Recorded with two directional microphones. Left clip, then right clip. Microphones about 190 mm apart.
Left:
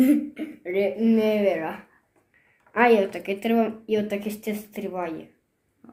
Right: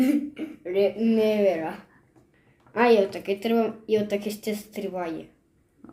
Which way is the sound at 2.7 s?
5° left (ahead or behind).